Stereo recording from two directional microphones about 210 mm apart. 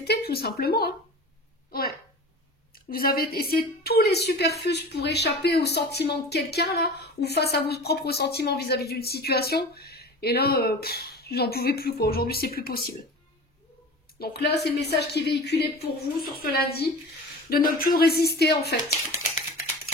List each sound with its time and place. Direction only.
0.0 s speech: 50° left (ahead or behind)
2.7 s speech: 45° left (ahead or behind)
14.1 s speech: 50° left (ahead or behind)